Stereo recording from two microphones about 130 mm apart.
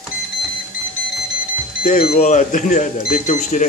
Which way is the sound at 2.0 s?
60° left (ahead or behind).